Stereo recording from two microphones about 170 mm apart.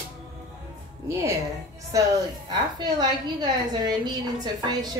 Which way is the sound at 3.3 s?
25° right (ahead or behind).